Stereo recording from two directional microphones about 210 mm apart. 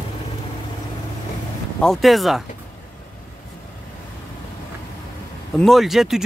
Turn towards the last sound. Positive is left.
turn(degrees=0)  # may be behind; listen again after turning